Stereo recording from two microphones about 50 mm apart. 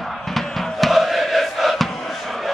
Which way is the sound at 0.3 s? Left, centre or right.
Centre.